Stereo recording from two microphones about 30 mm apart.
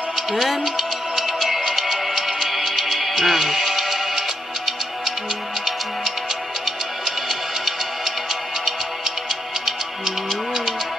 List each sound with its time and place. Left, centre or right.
0.1 s music: centre
6.6 s music: centre